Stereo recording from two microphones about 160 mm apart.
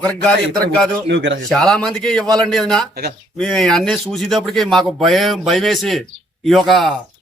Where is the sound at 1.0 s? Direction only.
90° right.